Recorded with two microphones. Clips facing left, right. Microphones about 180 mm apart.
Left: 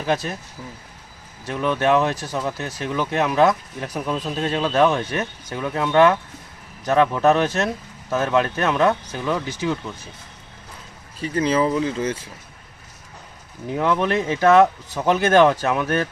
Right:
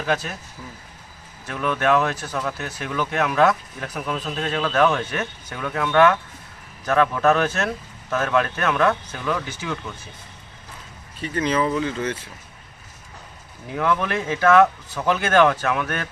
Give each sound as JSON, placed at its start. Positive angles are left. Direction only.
{"t": 1.5, "sound": "speech", "side_deg": 25}
{"t": 2.6, "sound": "speech", "side_deg": 35}
{"t": 2.9, "sound": "speech", "side_deg": 25}
{"t": 4.3, "sound": "speech", "side_deg": 25}
{"t": 5.0, "sound": "speech", "side_deg": 35}
{"t": 5.5, "sound": "speech", "side_deg": 25}
{"t": 11.2, "sound": "speech", "side_deg": 30}
{"t": 13.7, "sound": "speech", "side_deg": 20}